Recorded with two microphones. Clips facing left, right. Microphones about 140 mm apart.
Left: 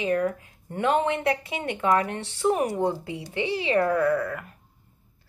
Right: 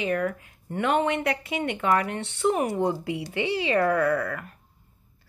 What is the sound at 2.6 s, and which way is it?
Speech, 15° right (ahead or behind).